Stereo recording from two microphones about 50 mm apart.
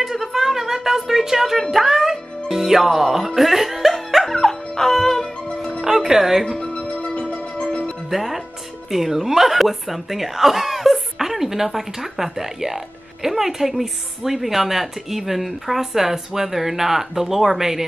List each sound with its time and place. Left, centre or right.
0.0 s speech: centre
1.6 s music: centre
5.9 s speech: centre
6.4 s music: centre
8.1 s speech: centre